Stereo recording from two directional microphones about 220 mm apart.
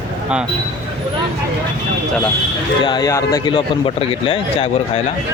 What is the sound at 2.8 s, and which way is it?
A man's voice, 20° left (ahead or behind).